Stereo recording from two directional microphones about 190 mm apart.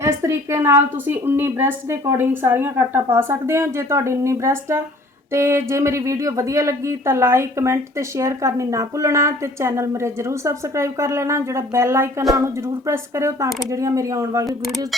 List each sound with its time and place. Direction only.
0.0 s speech: 15° right (ahead or behind)